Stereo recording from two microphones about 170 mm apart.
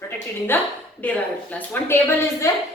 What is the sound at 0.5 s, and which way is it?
A woman's voice, 10° left (ahead or behind).